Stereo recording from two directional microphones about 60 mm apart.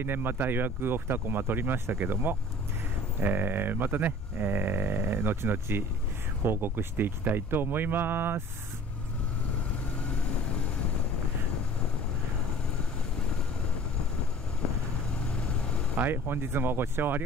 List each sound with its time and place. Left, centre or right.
0.0 s speech: right
16.0 s speech: right